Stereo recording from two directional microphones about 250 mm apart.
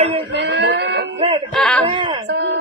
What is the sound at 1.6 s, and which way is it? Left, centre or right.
Speech, centre.